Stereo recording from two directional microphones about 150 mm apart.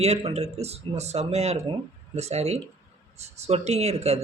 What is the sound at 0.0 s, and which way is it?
A man's voice, 45° right (ahead or behind).